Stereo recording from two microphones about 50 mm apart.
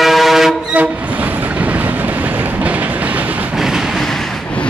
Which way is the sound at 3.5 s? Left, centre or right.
Centre.